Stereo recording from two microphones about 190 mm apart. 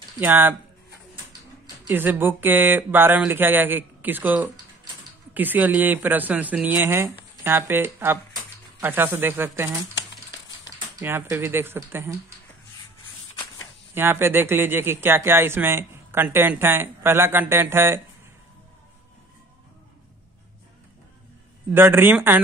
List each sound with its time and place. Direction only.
0.2 s speech: 10° right (ahead or behind)
1.9 s speech: 10° right (ahead or behind)
11.0 s speech: 10° right (ahead or behind)
13.9 s speech: 10° right (ahead or behind)
21.7 s speech: 10° right (ahead or behind)